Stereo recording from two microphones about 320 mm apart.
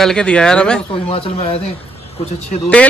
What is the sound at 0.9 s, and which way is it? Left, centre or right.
Speech, centre.